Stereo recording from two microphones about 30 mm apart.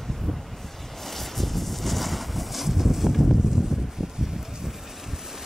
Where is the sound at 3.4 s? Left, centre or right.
Centre.